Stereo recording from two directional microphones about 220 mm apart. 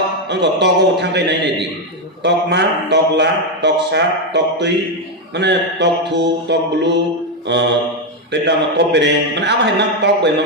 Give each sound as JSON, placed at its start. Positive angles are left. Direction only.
{"t": 0.3, "sound": "a man's voice", "side_deg": -50}